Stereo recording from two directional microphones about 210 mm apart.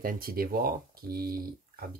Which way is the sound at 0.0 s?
45° right (ahead or behind).